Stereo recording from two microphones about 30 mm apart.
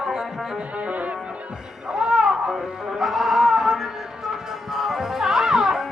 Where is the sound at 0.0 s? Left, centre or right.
Centre.